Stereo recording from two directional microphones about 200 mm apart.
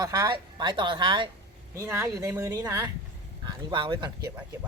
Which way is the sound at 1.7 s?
15° right (ahead or behind).